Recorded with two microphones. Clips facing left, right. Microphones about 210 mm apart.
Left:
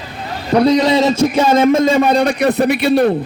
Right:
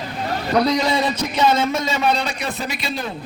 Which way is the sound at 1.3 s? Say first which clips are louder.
Left 7 dB; 50° left (ahead or behind).